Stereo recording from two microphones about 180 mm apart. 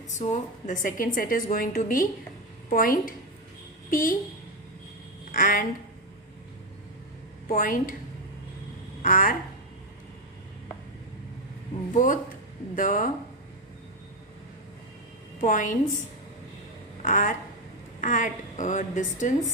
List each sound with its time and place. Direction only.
0.1 s a woman's voice: 40° left (ahead or behind)
5.3 s speech: 50° left (ahead or behind)
7.4 s a woman's voice: 50° left (ahead or behind)
9.0 s a woman's voice: 45° left (ahead or behind)
11.9 s a woman's voice: 45° left (ahead or behind)
15.4 s a woman's voice: 45° left (ahead or behind)
17.0 s a woman's voice: 45° left (ahead or behind)